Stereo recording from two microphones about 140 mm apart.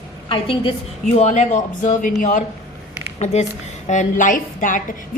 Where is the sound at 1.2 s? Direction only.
55° left (ahead or behind).